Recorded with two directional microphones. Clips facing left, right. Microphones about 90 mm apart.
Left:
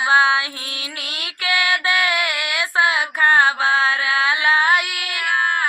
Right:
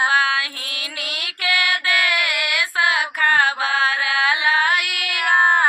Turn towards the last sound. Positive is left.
turn(degrees=-50)  # may be behind; listen again after turning